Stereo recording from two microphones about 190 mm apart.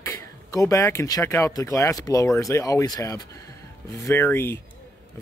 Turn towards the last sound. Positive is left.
turn(degrees=15)  # may be behind; listen again after turning